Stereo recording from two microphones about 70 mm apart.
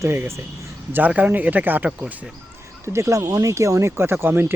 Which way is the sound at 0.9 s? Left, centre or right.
Right.